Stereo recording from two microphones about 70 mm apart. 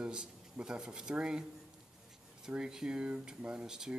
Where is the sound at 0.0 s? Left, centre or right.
Centre.